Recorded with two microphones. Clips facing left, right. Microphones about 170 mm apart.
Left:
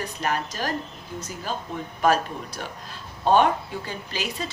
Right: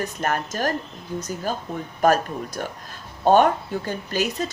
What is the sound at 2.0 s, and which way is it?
Speech, 45° right (ahead or behind).